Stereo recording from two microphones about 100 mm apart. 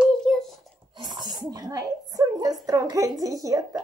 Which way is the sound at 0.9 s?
45° right (ahead or behind).